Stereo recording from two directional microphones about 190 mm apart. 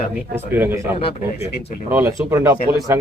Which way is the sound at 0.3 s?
10° right (ahead or behind).